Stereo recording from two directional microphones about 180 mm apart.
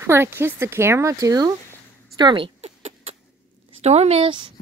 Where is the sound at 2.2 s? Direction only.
25° right (ahead or behind).